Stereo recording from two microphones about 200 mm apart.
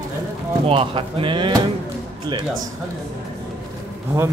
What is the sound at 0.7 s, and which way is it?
Speech, 30° right (ahead or behind).